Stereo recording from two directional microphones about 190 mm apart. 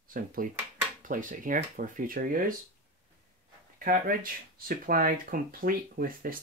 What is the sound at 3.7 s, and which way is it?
Speech, 45° right (ahead or behind).